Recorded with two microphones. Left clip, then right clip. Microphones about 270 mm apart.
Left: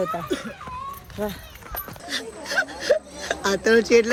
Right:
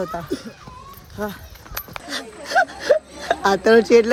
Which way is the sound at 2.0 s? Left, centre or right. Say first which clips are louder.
Left 1 dB; centre.